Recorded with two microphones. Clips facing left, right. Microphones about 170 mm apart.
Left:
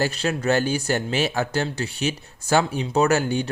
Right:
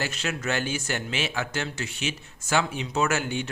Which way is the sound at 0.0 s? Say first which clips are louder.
Left 7 dB; 35° left (ahead or behind).